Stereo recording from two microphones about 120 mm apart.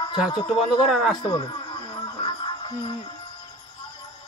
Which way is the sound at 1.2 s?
40° left (ahead or behind).